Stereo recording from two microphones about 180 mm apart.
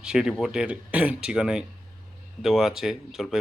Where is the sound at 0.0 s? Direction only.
5° right (ahead or behind).